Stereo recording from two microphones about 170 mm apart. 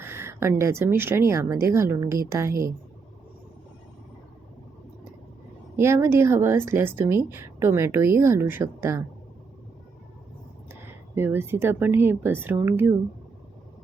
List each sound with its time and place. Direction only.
0.0 s speech: 15° right (ahead or behind)
5.7 s speech: 15° right (ahead or behind)
10.7 s speech: 10° right (ahead or behind)